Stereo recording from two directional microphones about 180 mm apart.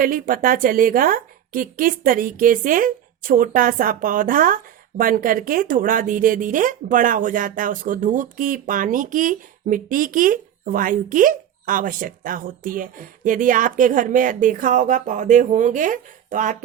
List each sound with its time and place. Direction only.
0.0 s a woman's voice: 50° right (ahead or behind)